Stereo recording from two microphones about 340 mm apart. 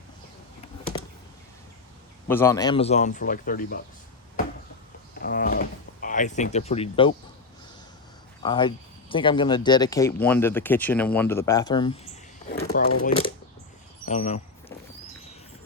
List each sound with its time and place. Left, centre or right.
2.2 s speech: centre; by 3.8 s left
5.2 s a sound: left
8.4 s speech: centre